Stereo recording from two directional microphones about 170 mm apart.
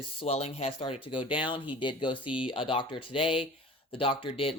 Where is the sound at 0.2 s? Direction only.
35° left (ahead or behind).